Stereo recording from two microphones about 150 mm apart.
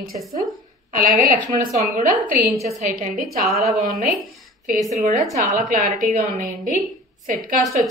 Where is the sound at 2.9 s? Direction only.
70° right (ahead or behind).